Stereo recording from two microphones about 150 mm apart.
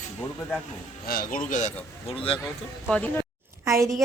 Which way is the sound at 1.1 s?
80° left.